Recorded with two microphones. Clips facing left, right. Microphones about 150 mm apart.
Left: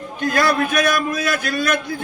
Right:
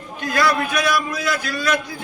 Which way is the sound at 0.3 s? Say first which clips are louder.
Left 1 dB; 50° left (ahead or behind).